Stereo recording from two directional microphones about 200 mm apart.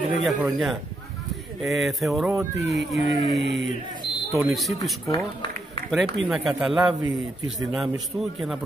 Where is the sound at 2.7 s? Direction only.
60° right (ahead or behind).